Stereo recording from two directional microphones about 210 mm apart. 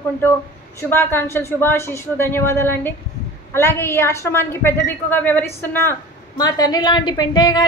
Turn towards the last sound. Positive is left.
turn(degrees=20)  # may be behind; listen again after turning